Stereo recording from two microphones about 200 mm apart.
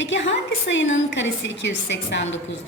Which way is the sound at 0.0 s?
65° left (ahead or behind).